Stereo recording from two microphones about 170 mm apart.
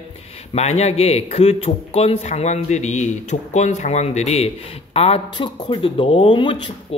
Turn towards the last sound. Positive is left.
turn(degrees=30)  # may be behind; listen again after turning